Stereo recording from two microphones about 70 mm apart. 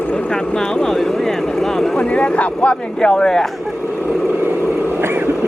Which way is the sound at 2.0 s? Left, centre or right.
Centre.